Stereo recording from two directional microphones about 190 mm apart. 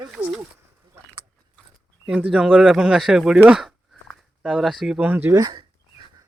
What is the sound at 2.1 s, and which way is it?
Speech, 5° right (ahead or behind).